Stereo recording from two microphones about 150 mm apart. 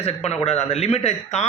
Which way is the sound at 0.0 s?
45° left (ahead or behind).